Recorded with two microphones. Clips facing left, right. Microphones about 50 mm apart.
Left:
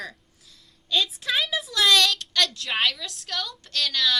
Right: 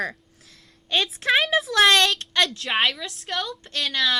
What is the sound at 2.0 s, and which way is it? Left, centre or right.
Speech, right.